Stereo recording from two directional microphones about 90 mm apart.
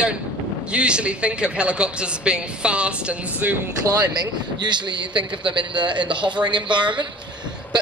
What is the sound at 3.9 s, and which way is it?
A man's voice, 50° right (ahead or behind).